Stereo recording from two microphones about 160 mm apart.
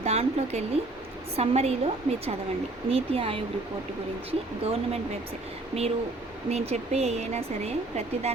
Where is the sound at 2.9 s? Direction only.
40° right (ahead or behind).